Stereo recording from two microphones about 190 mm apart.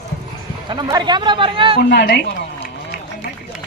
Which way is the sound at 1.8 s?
60° left (ahead or behind).